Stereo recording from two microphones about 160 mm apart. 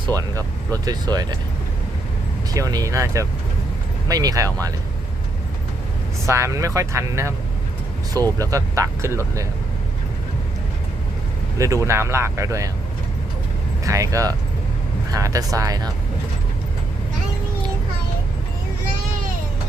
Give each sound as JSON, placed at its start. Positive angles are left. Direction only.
{"t": 0.2, "sound": "speech", "side_deg": -20}
{"t": 2.5, "sound": "speech", "side_deg": -25}
{"t": 6.2, "sound": "speech", "side_deg": -20}
{"t": 11.5, "sound": "speech", "side_deg": -20}
{"t": 13.8, "sound": "speech", "side_deg": -20}